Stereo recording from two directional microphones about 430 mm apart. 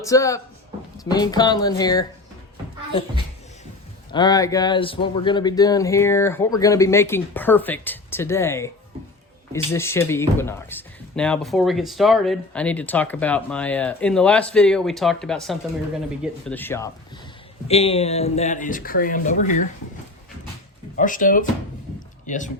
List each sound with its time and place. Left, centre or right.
0.0 s speech: centre
4.1 s speech: centre
20.9 s speech: centre